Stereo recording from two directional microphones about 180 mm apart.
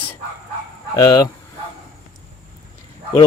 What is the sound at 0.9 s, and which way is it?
Speech, 20° left (ahead or behind).